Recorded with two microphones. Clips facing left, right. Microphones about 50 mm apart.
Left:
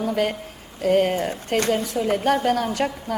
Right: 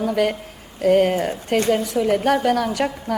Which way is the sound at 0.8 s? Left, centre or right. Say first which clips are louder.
Right 3 dB; centre.